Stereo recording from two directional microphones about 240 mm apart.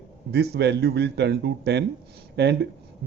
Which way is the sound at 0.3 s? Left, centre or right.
Right.